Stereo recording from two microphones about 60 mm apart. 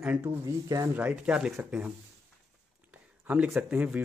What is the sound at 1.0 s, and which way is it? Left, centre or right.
Speech, centre.